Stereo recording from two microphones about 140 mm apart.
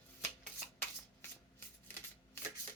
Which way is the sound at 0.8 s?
15° left (ahead or behind).